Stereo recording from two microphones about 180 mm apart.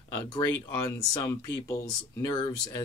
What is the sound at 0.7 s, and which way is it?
Speech, 15° left (ahead or behind).